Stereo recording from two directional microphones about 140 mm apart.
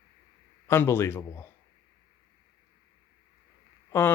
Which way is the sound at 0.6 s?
15° left (ahead or behind).